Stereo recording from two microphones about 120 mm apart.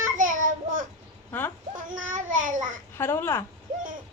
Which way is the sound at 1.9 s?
90° right.